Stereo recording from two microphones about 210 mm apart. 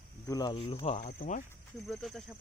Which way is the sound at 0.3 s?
20° left (ahead or behind).